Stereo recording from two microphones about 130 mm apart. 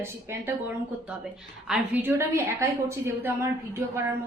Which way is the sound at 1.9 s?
20° right (ahead or behind).